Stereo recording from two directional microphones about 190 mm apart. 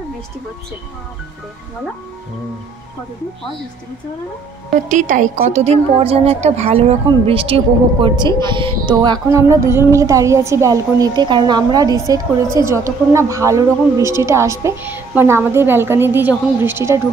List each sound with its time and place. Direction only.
4.8 s a woman's voice: 40° right (ahead or behind); by 17.0 s 15° right (ahead or behind)